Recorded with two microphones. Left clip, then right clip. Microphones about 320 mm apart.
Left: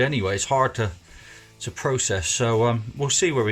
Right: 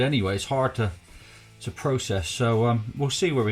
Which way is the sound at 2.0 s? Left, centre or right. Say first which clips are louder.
Left 4 dB; left.